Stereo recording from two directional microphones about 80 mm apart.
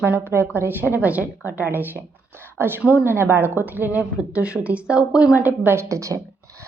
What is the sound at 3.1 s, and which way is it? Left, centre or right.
A woman's voice, right.